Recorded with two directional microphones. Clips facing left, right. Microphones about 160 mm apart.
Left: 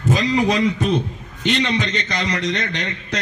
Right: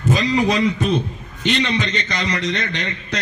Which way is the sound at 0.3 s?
45° left (ahead or behind).